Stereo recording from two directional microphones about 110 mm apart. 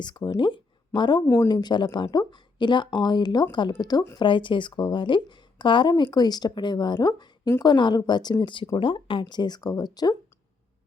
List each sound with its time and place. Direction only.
0.0 s a woman's voice: 40° left (ahead or behind)
4.2 s a woman's voice: 50° left (ahead or behind)